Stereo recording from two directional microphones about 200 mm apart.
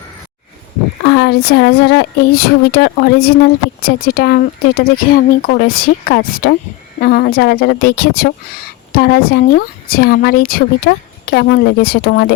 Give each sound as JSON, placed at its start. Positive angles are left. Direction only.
{"t": 1.0, "sound": "speech", "side_deg": 55}